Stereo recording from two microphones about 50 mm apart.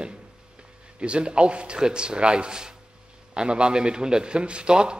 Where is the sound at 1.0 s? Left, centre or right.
Right.